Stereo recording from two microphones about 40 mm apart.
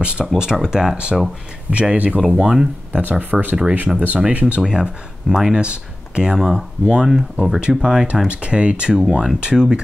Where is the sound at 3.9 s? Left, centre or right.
Centre.